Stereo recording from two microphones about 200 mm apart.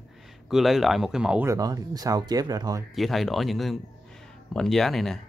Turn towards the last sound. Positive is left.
turn(degrees=0)  # may be behind; listen again after turning